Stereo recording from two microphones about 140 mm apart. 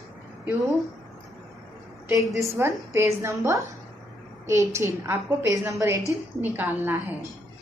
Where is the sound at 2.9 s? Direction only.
20° right (ahead or behind).